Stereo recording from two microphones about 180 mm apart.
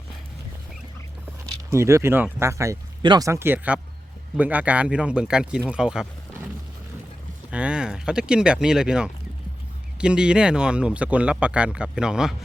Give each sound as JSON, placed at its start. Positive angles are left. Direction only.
{"t": 1.7, "sound": "speech", "side_deg": -15}
{"t": 7.5, "sound": "speech", "side_deg": -5}